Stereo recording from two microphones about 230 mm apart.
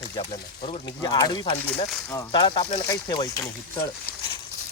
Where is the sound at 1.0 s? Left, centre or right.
Centre.